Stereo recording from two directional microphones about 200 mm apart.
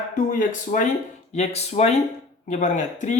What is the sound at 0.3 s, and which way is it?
Speech, 40° left (ahead or behind).